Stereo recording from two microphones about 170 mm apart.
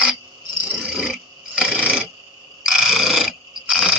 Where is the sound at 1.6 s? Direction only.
5° right (ahead or behind).